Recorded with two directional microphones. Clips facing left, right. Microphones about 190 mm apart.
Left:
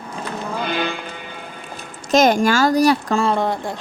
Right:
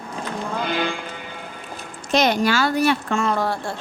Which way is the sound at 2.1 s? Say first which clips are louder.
Left 4 dB; 45° left (ahead or behind).